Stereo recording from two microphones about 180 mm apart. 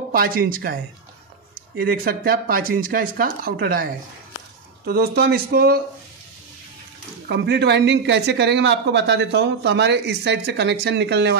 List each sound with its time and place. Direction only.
0.1 s speech: 55° right (ahead or behind)
1.8 s speech: 55° right (ahead or behind)
4.8 s speech: 60° right (ahead or behind)
7.2 s speech: 70° right (ahead or behind)